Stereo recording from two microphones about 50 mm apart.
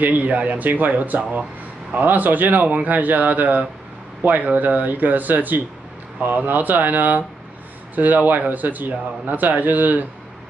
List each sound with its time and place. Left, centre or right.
0.0 s a man's voice: right